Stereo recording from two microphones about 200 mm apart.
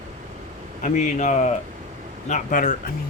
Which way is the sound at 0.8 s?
35° left (ahead or behind).